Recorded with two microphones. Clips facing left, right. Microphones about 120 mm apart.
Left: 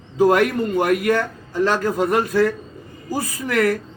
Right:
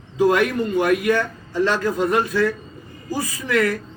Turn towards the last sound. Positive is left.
turn(degrees=50)  # may be behind; listen again after turning